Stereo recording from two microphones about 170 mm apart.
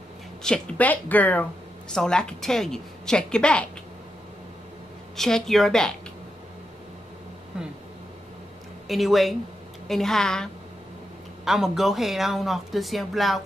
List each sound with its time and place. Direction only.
0.4 s speech: 5° left (ahead or behind)
5.1 s speech: centre (ahead or behind)
7.5 s speech: 5° right (ahead or behind)
8.8 s speech: centre (ahead or behind)